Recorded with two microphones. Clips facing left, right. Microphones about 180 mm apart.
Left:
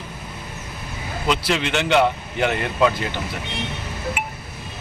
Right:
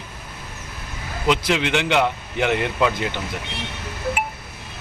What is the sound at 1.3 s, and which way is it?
A man's voice, 15° right (ahead or behind).